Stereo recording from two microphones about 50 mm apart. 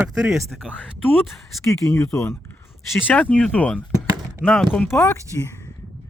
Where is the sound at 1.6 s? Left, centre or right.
Left.